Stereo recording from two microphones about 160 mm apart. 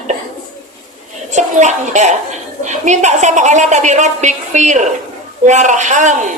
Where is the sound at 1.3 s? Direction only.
50° right (ahead or behind).